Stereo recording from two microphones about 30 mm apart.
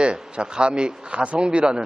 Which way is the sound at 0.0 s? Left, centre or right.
Right.